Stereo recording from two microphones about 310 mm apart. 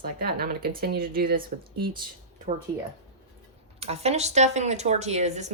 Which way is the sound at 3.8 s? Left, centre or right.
Centre.